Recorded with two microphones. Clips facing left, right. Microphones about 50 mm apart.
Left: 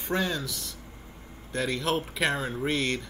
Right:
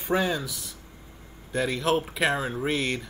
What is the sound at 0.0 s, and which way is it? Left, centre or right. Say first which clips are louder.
Speech: right 3 dB; centre.